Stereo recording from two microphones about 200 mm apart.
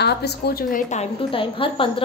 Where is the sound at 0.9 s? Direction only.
30° left (ahead or behind).